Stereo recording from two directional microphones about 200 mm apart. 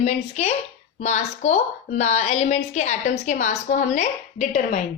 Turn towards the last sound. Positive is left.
turn(degrees=40)  # may be behind; listen again after turning